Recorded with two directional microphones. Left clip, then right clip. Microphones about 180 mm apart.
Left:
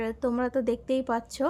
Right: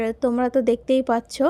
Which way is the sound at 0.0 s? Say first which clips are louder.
Right 7 dB; 30° right (ahead or behind).